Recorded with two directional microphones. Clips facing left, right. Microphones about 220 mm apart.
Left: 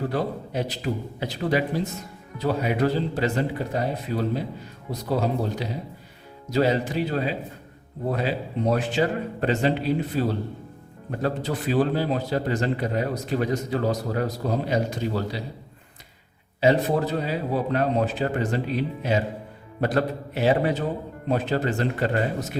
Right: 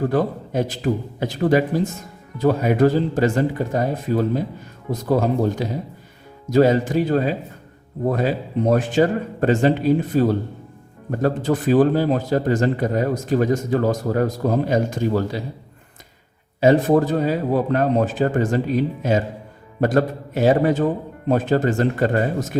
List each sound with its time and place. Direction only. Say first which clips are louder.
0.1 s a man's voice: right 6 dB; 50° right (ahead or behind)
16.6 s a man's voice: right 6 dB; 50° right (ahead or behind)